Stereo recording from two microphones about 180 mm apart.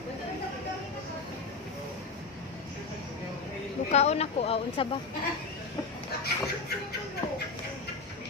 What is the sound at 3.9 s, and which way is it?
Speech, 40° left (ahead or behind).